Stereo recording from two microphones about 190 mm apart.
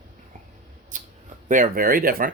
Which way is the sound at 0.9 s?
45° right (ahead or behind).